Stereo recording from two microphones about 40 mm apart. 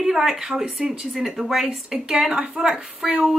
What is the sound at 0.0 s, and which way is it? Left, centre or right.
Speech, centre.